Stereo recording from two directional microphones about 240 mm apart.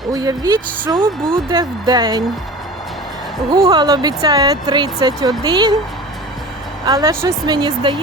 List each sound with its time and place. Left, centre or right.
0.1 s speech: centre
3.5 s speech: centre
6.8 s speech: centre